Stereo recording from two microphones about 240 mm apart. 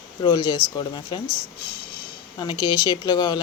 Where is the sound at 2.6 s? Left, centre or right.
Centre.